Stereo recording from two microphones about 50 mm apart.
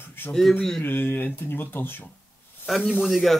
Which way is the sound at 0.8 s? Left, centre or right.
Left.